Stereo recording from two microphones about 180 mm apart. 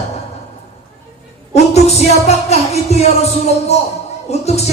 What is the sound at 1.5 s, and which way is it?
Music, 35° left (ahead or behind).